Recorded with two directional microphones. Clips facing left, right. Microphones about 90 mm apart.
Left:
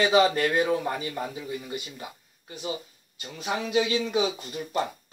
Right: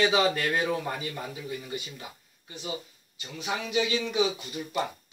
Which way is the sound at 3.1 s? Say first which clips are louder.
Left 2 dB; 40° left (ahead or behind).